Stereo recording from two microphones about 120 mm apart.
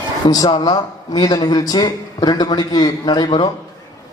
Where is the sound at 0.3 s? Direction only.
30° left (ahead or behind).